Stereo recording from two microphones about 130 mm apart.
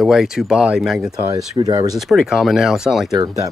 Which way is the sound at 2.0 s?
Centre (ahead or behind).